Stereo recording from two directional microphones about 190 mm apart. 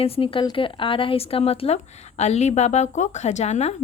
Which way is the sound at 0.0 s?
30° left (ahead or behind).